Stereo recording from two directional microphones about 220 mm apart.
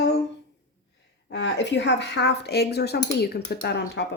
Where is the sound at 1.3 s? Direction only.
55° left (ahead or behind).